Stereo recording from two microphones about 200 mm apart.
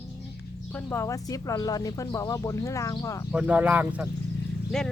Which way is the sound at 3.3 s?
5° right (ahead or behind).